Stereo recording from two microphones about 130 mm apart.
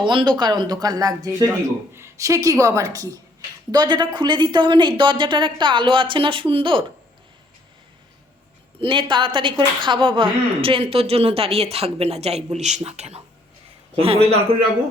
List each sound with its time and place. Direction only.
0.0 s a woman's voice: 35° right (ahead or behind)
8.8 s a woman's voice: 40° right (ahead or behind)